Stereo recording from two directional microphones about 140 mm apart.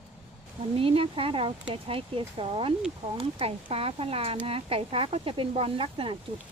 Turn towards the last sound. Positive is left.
turn(degrees=-40)  # may be behind; listen again after turning